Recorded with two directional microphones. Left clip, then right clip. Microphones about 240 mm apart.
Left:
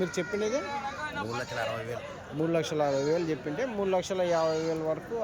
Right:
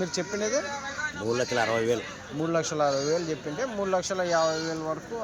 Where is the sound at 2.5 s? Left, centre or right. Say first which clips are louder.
Right 3 dB; centre.